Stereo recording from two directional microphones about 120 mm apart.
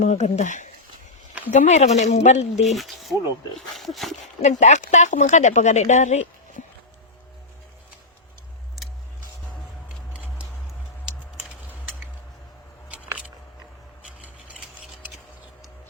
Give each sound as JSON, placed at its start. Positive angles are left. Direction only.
{"t": 0.0, "sound": "speech", "side_deg": 70}
{"t": 1.5, "sound": "speech", "side_deg": 75}
{"t": 2.6, "sound": "speech", "side_deg": 0}
{"t": 4.4, "sound": "speech", "side_deg": 80}